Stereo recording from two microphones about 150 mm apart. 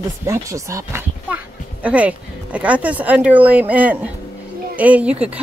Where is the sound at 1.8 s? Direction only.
10° right (ahead or behind).